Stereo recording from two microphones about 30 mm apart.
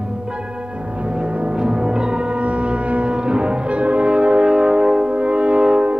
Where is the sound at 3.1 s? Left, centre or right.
Right.